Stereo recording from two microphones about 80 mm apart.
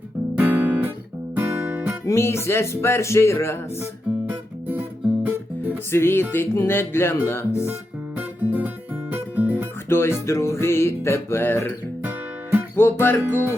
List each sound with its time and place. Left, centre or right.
0.3 s guitar: right
1.4 s music: right
2.0 s music: left
4.7 s guitar: right
5.9 s music: left
8.2 s guitar: right
9.1 s music: right
9.9 s music: left
12.7 s music: left